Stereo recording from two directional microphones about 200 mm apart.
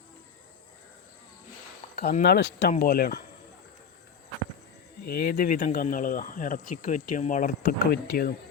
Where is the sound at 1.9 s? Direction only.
50° left (ahead or behind).